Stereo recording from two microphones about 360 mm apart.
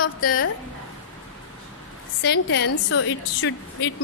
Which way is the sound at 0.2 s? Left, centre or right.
Left.